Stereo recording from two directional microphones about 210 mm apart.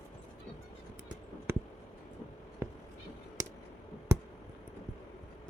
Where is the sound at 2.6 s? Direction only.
10° right (ahead or behind).